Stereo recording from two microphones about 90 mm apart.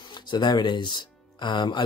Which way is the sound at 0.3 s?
55° left (ahead or behind).